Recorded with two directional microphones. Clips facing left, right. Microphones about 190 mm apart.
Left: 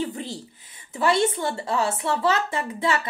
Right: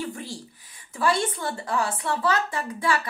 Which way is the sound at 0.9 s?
25° left (ahead or behind).